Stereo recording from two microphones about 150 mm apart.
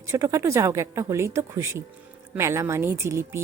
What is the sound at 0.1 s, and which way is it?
Speech, 20° right (ahead or behind).